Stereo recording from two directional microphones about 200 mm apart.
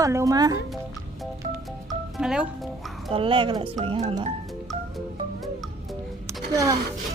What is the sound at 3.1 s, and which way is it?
Speech, 25° right (ahead or behind).